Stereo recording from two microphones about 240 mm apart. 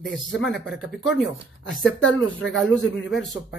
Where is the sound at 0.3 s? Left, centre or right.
Left.